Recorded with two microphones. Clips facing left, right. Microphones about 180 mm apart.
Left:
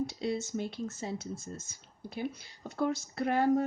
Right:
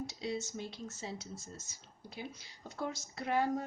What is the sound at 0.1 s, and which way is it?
Speech, 55° left (ahead or behind).